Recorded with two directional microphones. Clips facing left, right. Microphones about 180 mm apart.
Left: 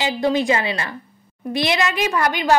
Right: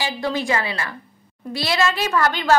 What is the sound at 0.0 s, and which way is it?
A woman's voice, 20° left (ahead or behind).